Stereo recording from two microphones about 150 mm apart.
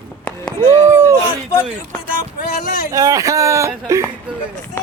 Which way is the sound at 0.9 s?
20° right (ahead or behind).